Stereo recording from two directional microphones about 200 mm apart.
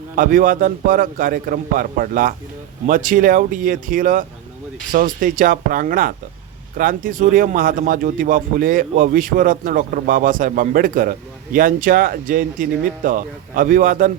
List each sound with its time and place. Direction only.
0.2 s speech: 45° right (ahead or behind)